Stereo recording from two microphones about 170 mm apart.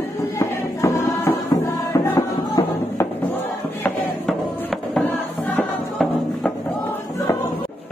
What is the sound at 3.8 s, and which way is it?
Music, centre (ahead or behind).